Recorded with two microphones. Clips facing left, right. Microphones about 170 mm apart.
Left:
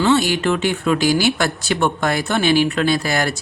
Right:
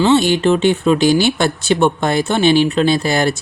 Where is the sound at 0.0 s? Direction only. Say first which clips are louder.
Right 4 dB; 25° right (ahead or behind).